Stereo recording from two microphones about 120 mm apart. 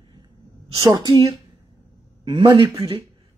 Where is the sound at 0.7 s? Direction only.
30° right (ahead or behind).